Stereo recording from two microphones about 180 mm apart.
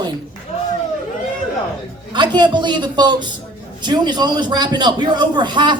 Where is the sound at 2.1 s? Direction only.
25° right (ahead or behind).